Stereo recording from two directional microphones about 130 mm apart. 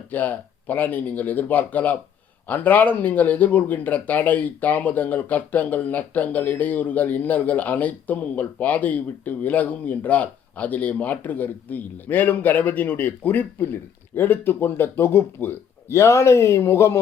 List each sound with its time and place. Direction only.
0.1 s speech: 15° left (ahead or behind)